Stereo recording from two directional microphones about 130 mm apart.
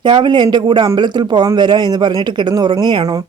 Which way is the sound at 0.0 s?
35° right (ahead or behind).